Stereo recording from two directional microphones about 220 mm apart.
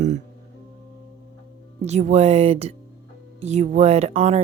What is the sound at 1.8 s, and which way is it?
Speech, 30° right (ahead or behind).